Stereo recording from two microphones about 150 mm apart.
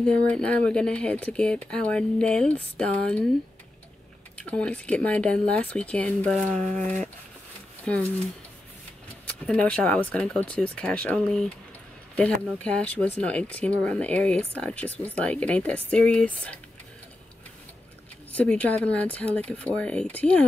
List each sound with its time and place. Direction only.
0.0 s speech: 5° left (ahead or behind)
4.4 s speech: 10° left (ahead or behind)
9.2 s speech: 10° left (ahead or behind)
12.6 s speech: 10° left (ahead or behind)
18.3 s speech: 10° left (ahead or behind)